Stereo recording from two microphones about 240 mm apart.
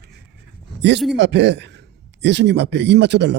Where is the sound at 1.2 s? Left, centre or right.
Right.